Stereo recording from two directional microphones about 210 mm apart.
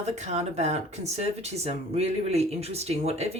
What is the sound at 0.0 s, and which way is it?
Speech, 30° right (ahead or behind).